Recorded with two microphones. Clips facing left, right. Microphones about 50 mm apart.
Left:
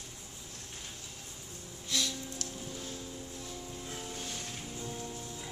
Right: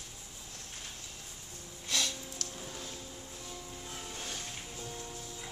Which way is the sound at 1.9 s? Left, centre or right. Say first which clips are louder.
Even; right.